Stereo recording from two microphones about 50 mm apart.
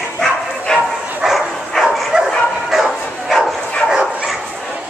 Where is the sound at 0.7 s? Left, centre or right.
Centre.